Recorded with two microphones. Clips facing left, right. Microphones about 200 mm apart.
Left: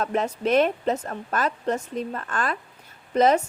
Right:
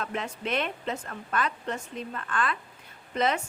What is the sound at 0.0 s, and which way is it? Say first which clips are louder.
A woman's voice: left 8 dB; 40° left (ahead or behind).